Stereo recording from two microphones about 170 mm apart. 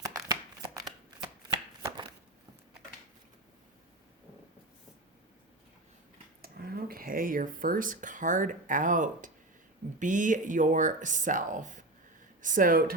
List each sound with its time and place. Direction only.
0.0 s shuffling cards: 20° right (ahead or behind)
6.4 s speech: 60° right (ahead or behind)